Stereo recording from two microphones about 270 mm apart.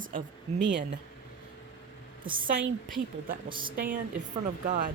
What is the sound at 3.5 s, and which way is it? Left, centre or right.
Speech, centre.